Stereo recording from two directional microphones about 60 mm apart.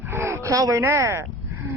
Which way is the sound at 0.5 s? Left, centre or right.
Right.